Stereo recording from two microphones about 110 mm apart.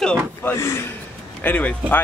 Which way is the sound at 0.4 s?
20° left (ahead or behind).